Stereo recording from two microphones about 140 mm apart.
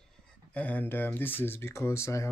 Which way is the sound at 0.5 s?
10° left (ahead or behind).